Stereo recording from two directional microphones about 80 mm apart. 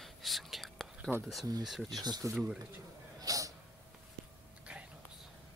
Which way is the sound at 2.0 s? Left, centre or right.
Right.